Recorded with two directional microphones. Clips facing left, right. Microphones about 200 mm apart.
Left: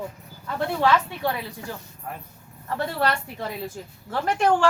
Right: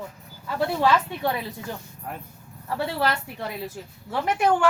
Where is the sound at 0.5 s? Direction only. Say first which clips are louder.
Even; 10° right (ahead or behind).